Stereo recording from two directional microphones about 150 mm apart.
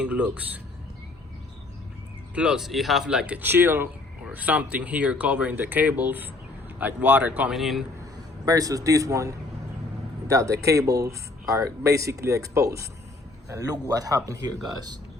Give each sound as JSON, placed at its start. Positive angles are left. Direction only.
{"t": 0.0, "sound": "speech", "side_deg": -10}
{"t": 2.3, "sound": "speech", "side_deg": -5}
{"t": 8.4, "sound": "speech", "side_deg": -25}